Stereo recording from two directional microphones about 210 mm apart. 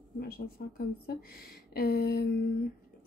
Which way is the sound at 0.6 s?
50° left (ahead or behind).